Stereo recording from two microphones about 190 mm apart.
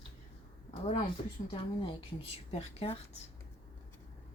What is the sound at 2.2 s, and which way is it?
Speech, 35° left (ahead or behind).